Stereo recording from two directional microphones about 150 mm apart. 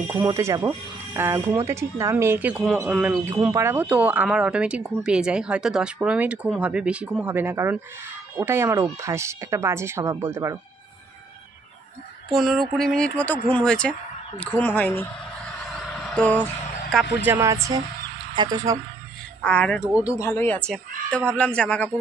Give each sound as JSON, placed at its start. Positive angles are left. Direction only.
{"t": 0.1, "sound": "speech", "side_deg": -15}
{"t": 12.3, "sound": "speech", "side_deg": 0}
{"t": 15.7, "sound": "a sound", "side_deg": 10}
{"t": 17.2, "sound": "speech", "side_deg": -15}
{"t": 19.4, "sound": "speech", "side_deg": 10}
{"t": 20.0, "sound": "speech", "side_deg": 20}